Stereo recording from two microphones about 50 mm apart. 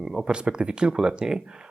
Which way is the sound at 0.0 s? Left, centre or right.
Centre.